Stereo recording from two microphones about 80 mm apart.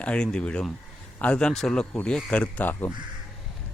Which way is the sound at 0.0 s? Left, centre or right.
Centre.